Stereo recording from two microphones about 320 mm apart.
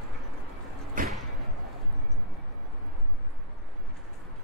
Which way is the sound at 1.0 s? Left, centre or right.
Right.